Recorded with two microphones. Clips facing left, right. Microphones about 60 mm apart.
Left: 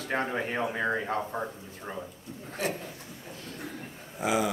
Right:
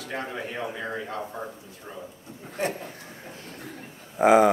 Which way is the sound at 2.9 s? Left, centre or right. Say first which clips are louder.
Right 2 dB; right.